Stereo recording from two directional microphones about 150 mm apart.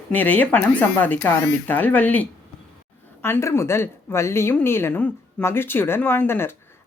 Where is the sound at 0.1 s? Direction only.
10° left (ahead or behind).